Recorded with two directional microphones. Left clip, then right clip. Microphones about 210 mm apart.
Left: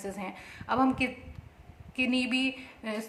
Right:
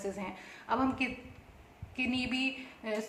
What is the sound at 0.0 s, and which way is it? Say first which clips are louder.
A woman's voice: left 1 dB; 55° left (ahead or behind).